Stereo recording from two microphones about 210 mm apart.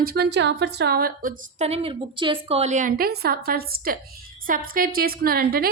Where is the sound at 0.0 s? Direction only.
50° right (ahead or behind).